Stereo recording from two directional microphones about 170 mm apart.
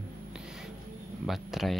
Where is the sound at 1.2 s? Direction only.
Centre (ahead or behind).